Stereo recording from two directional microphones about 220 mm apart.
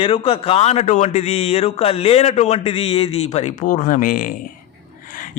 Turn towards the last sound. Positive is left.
turn(degrees=40)  # may be behind; listen again after turning